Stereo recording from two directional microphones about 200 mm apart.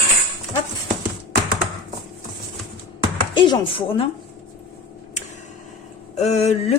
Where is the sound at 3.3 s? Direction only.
25° left (ahead or behind).